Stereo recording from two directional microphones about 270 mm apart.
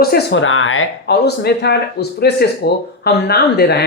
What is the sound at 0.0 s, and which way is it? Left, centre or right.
Speech, left.